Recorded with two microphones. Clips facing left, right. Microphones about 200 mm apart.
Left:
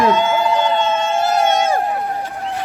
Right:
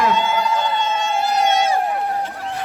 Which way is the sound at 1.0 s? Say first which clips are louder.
Left 3 dB; 50° left (ahead or behind).